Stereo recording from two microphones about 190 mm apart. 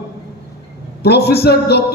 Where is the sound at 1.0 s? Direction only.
60° left (ahead or behind).